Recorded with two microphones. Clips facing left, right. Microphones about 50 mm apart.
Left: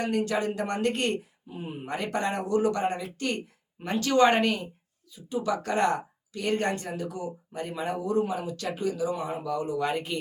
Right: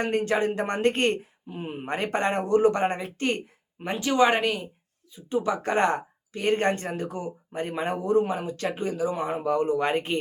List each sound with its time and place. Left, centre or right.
0.0 s speech: right
3.8 s speech: right
5.1 s speech: right